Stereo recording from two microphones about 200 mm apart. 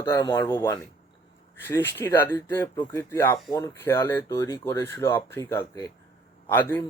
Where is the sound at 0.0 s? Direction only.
20° left (ahead or behind).